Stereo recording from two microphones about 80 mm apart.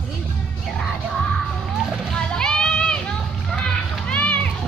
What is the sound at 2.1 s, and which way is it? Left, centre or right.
Children playing, centre.